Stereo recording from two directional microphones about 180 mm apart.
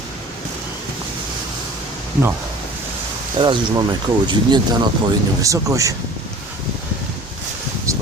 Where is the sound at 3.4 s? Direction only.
25° right (ahead or behind).